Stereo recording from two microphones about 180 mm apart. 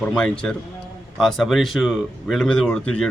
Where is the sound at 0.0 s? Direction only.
5° left (ahead or behind).